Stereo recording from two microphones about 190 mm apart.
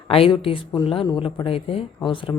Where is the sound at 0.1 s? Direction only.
30° left (ahead or behind).